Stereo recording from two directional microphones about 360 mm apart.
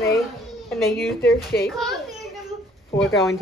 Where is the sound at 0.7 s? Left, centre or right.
Centre.